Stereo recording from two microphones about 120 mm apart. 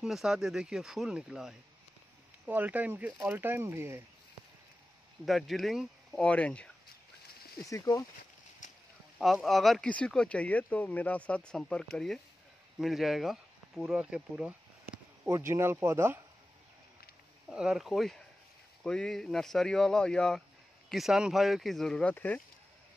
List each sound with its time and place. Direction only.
0.0 s speech: 5° right (ahead or behind); by 4.0 s 20° right (ahead or behind)
5.2 s speech: centre (ahead or behind)
7.6 s speech: 30° left (ahead or behind)
9.2 s speech: centre (ahead or behind)
15.2 s speech: 25° right (ahead or behind)
17.5 s speech: 5° right (ahead or behind); by 22.4 s 15° left (ahead or behind)